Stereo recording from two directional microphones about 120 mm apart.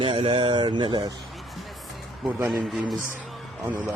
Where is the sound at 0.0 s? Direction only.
55° right (ahead or behind); by 1.1 s 40° right (ahead or behind).